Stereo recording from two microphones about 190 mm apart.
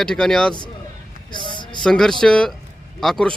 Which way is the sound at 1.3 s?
25° left (ahead or behind).